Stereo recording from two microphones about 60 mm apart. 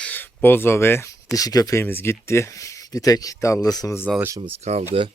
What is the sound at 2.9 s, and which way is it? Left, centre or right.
Speech, left.